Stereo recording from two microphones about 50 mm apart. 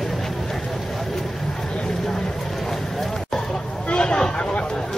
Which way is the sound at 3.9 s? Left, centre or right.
Centre.